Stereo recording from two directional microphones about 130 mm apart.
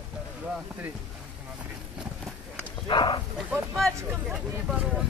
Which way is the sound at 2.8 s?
40° left (ahead or behind).